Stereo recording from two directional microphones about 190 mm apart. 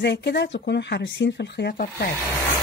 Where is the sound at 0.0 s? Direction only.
65° left (ahead or behind).